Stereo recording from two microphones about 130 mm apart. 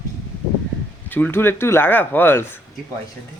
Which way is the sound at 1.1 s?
15° left (ahead or behind).